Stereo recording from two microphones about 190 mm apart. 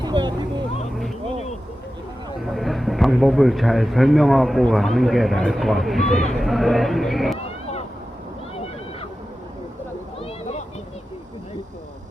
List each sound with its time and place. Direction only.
0.0 s vehicle: 25° right (ahead or behind)
2.4 s speech: centre (ahead or behind)
10.2 s a sound: 30° left (ahead or behind)